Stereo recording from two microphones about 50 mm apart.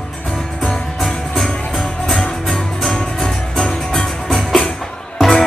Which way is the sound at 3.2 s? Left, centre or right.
Centre.